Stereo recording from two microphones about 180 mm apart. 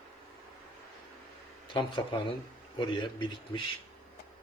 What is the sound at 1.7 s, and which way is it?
A man's voice, 30° left (ahead or behind).